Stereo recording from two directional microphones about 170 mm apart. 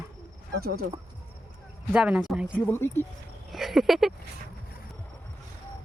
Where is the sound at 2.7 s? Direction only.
15° left (ahead or behind).